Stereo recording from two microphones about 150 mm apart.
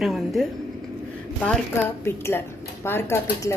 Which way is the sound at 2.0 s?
15° left (ahead or behind).